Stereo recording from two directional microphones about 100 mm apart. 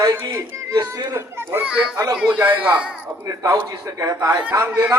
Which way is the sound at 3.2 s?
30° right (ahead or behind).